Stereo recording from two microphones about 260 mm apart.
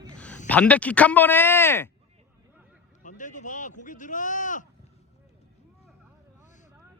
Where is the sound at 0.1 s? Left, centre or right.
Centre.